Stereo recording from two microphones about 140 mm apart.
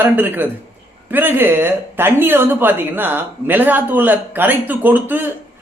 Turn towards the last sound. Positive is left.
turn(degrees=-15)  # may be behind; listen again after turning